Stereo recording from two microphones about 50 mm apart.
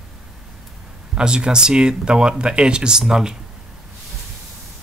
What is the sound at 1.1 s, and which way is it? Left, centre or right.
Speech, centre.